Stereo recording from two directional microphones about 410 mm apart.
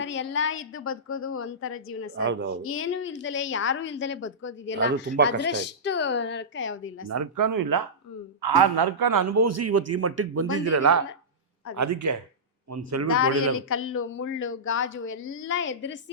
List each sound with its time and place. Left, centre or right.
0.0 s a woman's voice: left
2.2 s a woman's voice: right
2.6 s speech: left
7.1 s speech: right
8.4 s a man's voice: right
13.1 s a woman's voice: left